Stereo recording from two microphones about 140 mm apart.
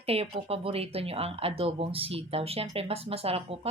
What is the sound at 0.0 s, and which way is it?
Speech, 45° right (ahead or behind).